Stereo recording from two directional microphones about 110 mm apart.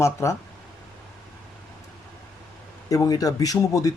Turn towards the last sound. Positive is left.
turn(degrees=30)  # may be behind; listen again after turning